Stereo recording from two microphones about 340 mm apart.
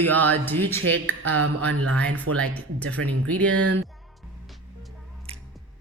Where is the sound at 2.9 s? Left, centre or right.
Right.